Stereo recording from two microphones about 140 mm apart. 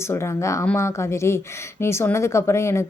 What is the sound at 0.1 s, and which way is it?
Speech, 20° left (ahead or behind).